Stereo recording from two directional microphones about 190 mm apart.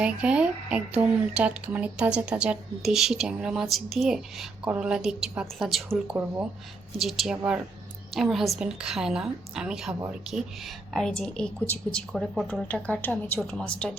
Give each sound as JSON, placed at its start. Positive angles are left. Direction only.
{"t": 0.0, "sound": "speech", "side_deg": -5}